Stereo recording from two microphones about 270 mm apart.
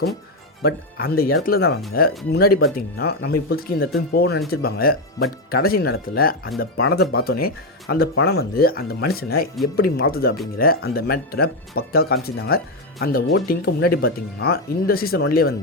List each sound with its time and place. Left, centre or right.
0.6 s speech: left